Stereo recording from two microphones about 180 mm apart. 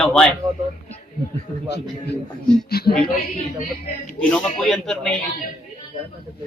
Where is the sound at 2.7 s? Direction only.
60° left (ahead or behind).